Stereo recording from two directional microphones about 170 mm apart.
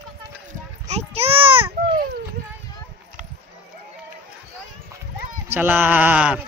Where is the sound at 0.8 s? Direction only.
40° right (ahead or behind).